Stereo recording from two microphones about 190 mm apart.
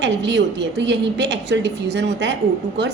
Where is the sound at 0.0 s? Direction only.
65° right (ahead or behind).